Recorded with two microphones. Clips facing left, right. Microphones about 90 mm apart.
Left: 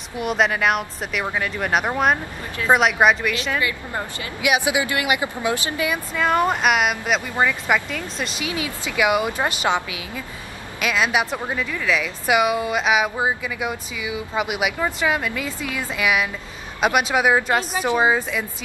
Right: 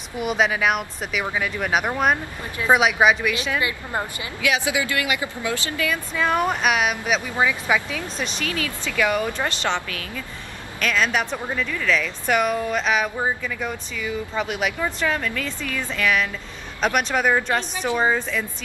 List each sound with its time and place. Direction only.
0.2 s a woman's voice: centre (ahead or behind)
4.4 s speech: 20° left (ahead or behind)
6.1 s a woman's voice: centre (ahead or behind)
8.5 s a woman's voice: 15° left (ahead or behind)